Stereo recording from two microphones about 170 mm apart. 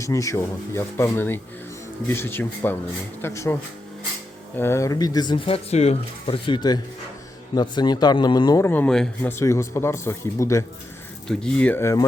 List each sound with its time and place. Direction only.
0.0 s speech: 20° left (ahead or behind)
5.7 s speech: 40° left (ahead or behind); by 10.7 s 20° left (ahead or behind)
11.3 s speech: 5° left (ahead or behind)